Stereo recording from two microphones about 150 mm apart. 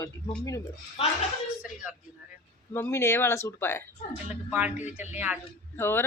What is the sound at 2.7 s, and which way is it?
A woman's voice, 15° left (ahead or behind).